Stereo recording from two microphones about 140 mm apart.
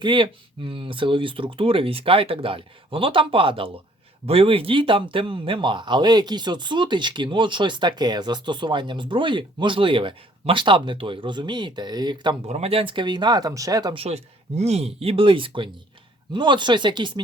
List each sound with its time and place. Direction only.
0.0 s speech: 35° right (ahead or behind)
12.5 s speech: 50° right (ahead or behind); by 13.9 s 25° right (ahead or behind)
13.9 s speech: 45° right (ahead or behind)